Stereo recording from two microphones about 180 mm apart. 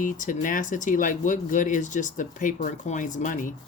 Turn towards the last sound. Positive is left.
turn(degrees=45)  # may be behind; listen again after turning